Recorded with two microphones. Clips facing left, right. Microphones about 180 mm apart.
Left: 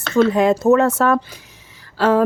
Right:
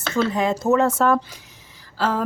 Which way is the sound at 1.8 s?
65° left (ahead or behind).